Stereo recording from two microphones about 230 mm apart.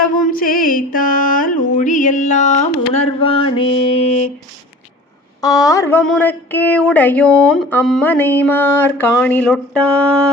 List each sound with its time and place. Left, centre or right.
0.0 s music: left
5.4 s speech: centre
9.1 s a sound: centre